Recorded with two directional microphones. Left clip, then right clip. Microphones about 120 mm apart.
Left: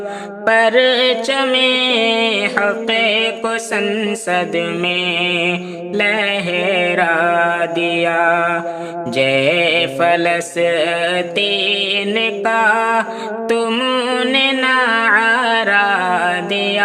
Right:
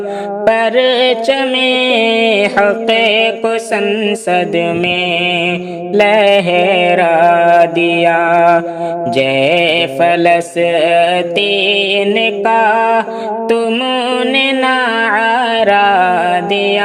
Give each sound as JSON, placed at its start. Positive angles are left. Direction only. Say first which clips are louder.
{"t": 0.4, "sound": "mantra", "louder": "right 1 dB", "side_deg": -25}
{"t": 14.1, "sound": "mantra", "louder": "right 4 dB", "side_deg": -20}